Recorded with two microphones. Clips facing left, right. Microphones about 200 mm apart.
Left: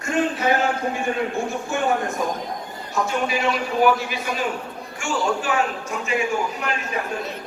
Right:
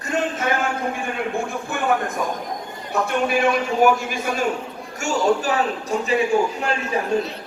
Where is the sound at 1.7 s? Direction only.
55° right (ahead or behind).